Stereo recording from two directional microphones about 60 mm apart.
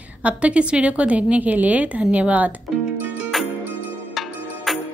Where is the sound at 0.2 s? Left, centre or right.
Right.